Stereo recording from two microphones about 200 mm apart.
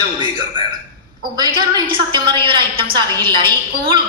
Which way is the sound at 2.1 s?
25° right (ahead or behind).